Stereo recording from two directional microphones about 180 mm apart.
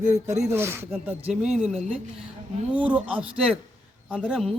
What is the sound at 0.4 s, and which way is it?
A man's voice, 15° right (ahead or behind).